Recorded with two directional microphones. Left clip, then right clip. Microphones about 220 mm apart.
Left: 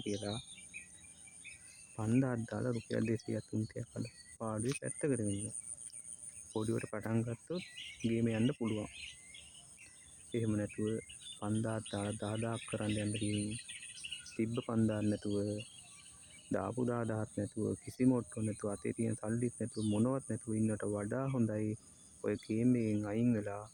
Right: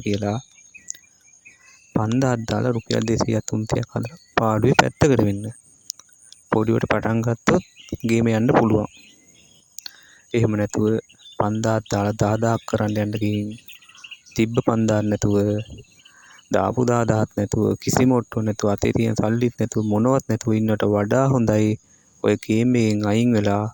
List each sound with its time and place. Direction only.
0.0 s speech: 40° right (ahead or behind)
2.0 s speech: 40° right (ahead or behind)
6.6 s speech: 45° right (ahead or behind)
10.3 s speech: 45° right (ahead or behind)
14.3 s speech: 40° right (ahead or behind)